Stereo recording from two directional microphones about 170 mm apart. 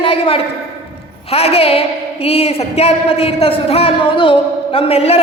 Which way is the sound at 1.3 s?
35° left (ahead or behind).